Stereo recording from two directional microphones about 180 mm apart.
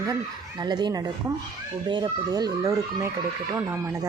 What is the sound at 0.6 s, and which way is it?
Speech, 25° right (ahead or behind).